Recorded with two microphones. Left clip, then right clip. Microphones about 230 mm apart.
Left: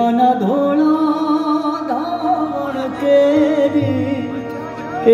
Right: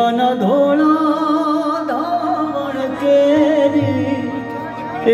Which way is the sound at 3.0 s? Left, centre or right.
Centre.